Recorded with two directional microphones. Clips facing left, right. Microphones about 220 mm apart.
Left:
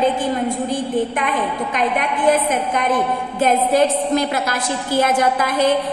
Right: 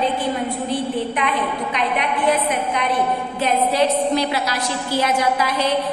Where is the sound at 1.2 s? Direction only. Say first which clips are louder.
Left 1 dB; 50° left (ahead or behind).